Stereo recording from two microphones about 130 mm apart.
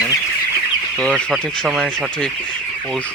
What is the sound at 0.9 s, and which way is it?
Speech, 10° left (ahead or behind).